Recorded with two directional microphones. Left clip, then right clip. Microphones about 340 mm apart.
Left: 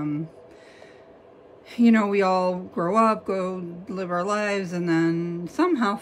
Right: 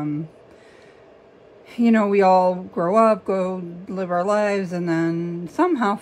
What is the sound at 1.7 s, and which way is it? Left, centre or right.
Speech, centre.